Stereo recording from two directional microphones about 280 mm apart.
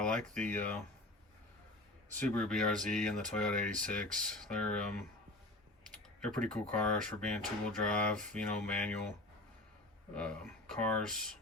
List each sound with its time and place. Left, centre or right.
0.1 s speech: right
0.4 s speech: centre
2.1 s speech: centre
6.2 s speech: centre
10.2 s speech: centre